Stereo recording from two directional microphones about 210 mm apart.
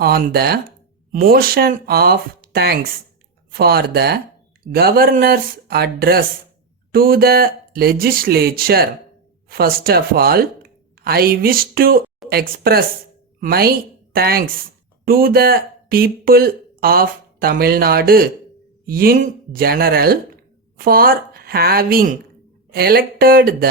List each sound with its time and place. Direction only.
0.0 s a woman's voice: 45° right (ahead or behind)